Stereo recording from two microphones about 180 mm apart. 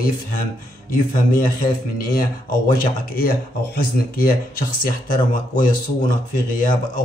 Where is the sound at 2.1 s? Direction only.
50° left (ahead or behind).